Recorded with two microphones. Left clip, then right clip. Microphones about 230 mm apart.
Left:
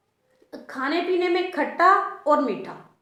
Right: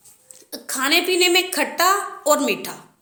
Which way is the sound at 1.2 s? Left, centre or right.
Right.